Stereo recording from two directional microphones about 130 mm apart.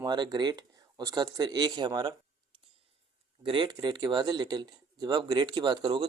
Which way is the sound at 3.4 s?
40° right (ahead or behind).